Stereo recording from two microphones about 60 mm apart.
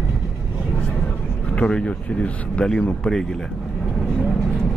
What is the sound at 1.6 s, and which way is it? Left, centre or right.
Speech, centre.